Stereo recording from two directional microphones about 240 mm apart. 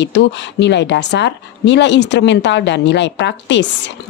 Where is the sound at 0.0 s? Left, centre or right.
Left.